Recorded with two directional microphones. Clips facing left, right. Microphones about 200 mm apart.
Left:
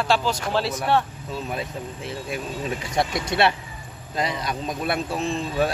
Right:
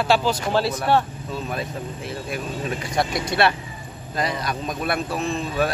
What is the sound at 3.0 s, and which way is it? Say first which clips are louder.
Speech: even; 20° left (ahead or behind).